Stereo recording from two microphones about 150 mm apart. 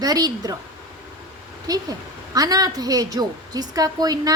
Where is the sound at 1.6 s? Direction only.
25° right (ahead or behind).